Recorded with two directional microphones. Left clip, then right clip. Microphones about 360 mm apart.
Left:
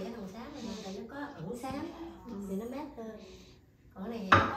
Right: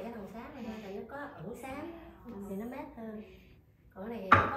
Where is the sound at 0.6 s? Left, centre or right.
Centre.